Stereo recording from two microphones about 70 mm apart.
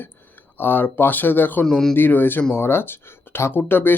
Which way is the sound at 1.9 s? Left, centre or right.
Left.